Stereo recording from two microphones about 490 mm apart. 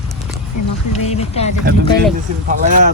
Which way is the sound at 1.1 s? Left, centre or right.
Centre.